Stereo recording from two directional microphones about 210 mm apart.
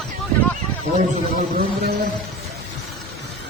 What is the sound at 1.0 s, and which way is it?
Speech, 45° right (ahead or behind).